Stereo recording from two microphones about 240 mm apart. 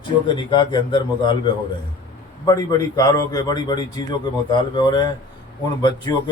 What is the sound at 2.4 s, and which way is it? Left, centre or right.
A man's voice, centre.